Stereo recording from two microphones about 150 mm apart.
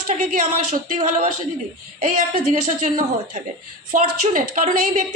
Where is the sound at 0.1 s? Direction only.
60° right (ahead or behind).